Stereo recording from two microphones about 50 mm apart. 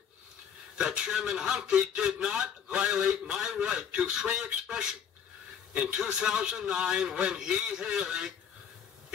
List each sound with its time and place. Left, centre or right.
0.7 s a man's voice: centre
5.9 s a man's voice: centre